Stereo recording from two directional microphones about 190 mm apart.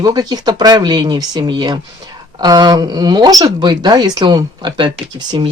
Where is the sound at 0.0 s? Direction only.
20° right (ahead or behind).